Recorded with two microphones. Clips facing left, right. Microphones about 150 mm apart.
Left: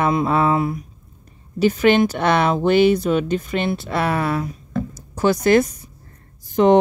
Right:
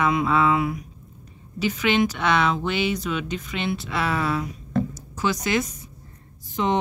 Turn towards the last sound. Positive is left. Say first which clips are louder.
# left 10 dB
turn(degrees=55)  # may be behind; listen again after turning